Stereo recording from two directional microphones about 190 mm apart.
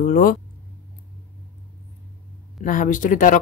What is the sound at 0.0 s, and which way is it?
Speech, 45° left (ahead or behind).